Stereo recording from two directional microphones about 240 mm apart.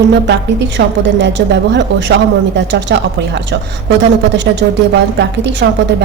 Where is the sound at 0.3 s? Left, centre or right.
Right.